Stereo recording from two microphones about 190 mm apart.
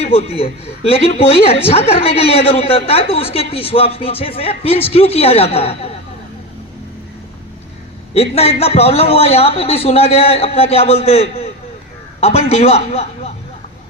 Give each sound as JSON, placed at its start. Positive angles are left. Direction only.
{"t": 0.0, "sound": "a woman's voice", "side_deg": 30}
{"t": 8.1, "sound": "a woman's voice", "side_deg": 30}